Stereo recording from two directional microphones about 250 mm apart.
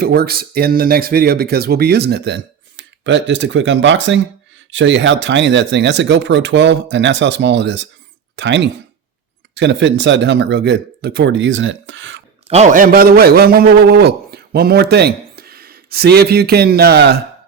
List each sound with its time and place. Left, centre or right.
0.0 s speech: right
12.5 s a man's voice: right